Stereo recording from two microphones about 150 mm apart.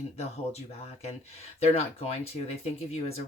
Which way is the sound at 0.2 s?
45° left (ahead or behind).